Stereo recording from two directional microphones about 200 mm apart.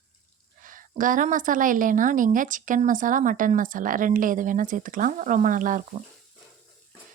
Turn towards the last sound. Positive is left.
turn(degrees=-40)  # may be behind; listen again after turning